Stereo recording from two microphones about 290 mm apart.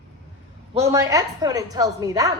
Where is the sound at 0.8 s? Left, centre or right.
Centre.